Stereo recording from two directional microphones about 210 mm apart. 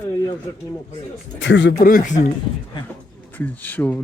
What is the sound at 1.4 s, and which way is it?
Speech, 60° left (ahead or behind).